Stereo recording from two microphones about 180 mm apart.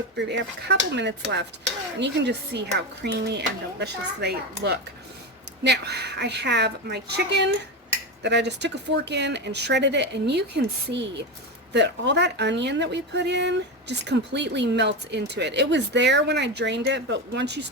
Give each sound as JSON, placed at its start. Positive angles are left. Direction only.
{"t": 0.3, "sound": "a woman's voice", "side_deg": -75}